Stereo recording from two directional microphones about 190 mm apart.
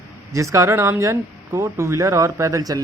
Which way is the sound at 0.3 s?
15° right (ahead or behind).